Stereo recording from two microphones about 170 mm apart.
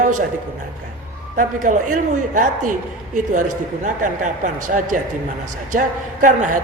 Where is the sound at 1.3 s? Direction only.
50° right (ahead or behind).